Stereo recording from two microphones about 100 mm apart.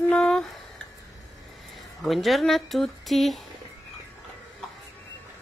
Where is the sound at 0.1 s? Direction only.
5° left (ahead or behind).